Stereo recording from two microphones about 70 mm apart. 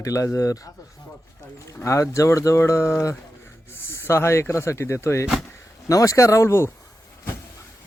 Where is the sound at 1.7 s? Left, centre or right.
Left.